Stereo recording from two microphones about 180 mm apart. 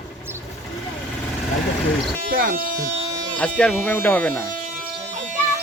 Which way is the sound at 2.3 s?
55° right (ahead or behind).